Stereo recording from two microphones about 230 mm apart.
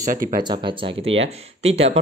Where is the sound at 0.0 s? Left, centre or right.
Right.